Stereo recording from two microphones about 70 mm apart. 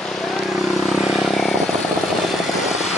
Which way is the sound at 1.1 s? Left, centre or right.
Centre.